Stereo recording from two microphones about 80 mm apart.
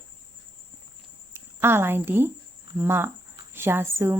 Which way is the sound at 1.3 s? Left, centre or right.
Right.